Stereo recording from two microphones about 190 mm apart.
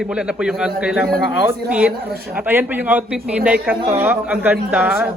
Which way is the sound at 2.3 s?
10° right (ahead or behind).